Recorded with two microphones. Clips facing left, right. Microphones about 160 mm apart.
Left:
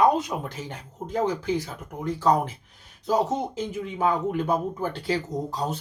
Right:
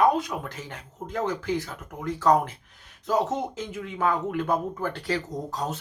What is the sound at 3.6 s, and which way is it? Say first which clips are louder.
Speech: left 2 dB; 30° left (ahead or behind).